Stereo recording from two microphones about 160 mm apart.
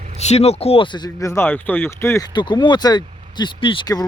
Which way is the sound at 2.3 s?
30° left (ahead or behind).